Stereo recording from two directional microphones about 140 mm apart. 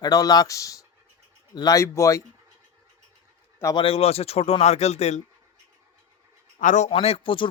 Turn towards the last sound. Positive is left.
turn(degrees=40)  # may be behind; listen again after turning